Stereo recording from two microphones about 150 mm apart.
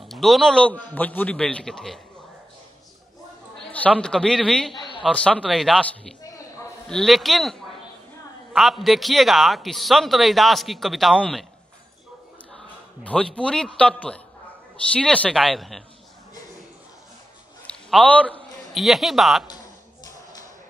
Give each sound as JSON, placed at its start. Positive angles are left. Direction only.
{"t": 0.0, "sound": "a man's voice", "side_deg": 0}
{"t": 3.5, "sound": "chatter", "side_deg": 5}
{"t": 4.0, "sound": "a man's voice", "side_deg": 5}
{"t": 4.7, "sound": "a sound", "side_deg": 30}
{"t": 5.1, "sound": "a man's voice", "side_deg": 5}
{"t": 12.5, "sound": "a man's voice", "side_deg": 5}
{"t": 17.6, "sound": "a sound", "side_deg": 5}
{"t": 18.7, "sound": "a man's voice", "side_deg": 0}